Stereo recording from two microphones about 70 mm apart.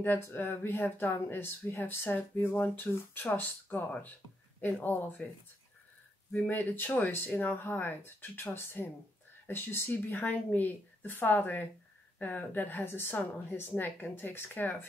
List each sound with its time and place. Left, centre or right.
0.0 s a woman's voice: left
6.3 s a woman's voice: left